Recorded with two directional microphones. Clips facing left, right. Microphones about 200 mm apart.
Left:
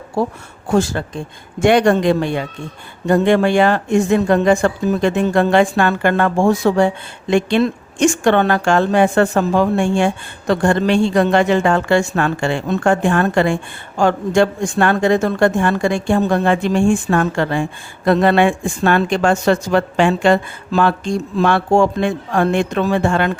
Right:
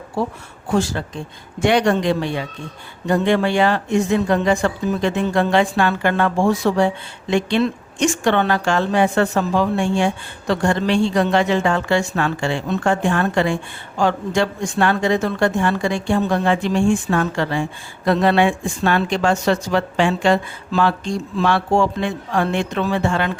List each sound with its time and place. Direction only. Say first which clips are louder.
0.2 s speech: left 4 dB; 45° left (ahead or behind)